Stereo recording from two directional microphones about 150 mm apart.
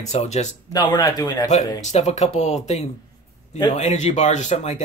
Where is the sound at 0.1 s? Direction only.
50° left (ahead or behind).